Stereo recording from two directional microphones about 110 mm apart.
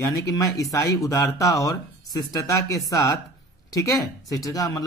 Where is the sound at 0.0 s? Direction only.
30° left (ahead or behind).